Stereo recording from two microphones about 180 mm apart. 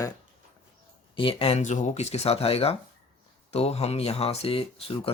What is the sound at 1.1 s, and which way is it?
Speech, 30° left (ahead or behind).